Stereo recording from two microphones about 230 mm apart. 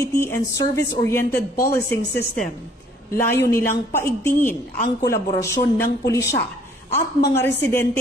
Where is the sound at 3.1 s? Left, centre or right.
Centre.